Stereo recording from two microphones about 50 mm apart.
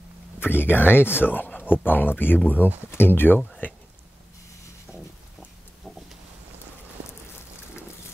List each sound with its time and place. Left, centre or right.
0.4 s speech: left